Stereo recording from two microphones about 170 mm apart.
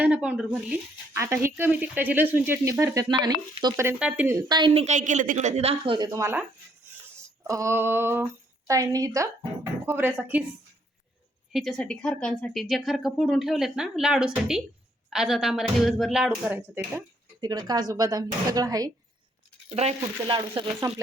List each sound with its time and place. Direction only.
0.0 s speech: 5° right (ahead or behind)
1.1 s speech: 15° right (ahead or behind)
3.8 s a woman's voice: 10° right (ahead or behind); by 6.1 s 30° right (ahead or behind)
6.1 s speech: 15° right (ahead or behind)
7.4 s speech: 20° right (ahead or behind)
11.5 s speech: 5° left (ahead or behind)
17.4 s speech: 20° right (ahead or behind)
19.7 s a woman's voice: 40° right (ahead or behind)